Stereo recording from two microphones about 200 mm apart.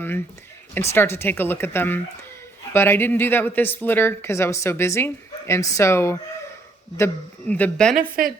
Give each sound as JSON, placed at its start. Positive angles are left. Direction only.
{"t": 0.7, "sound": "speech", "side_deg": 10}
{"t": 8.2, "sound": "a woman's voice", "side_deg": -45}